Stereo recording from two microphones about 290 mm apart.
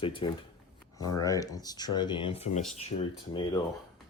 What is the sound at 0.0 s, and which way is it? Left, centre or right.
Speech, centre.